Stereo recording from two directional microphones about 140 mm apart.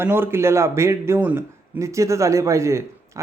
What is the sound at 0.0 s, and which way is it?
A man's voice, 15° right (ahead or behind).